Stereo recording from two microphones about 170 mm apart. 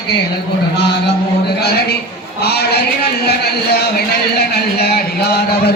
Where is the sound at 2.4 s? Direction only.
70° left (ahead or behind).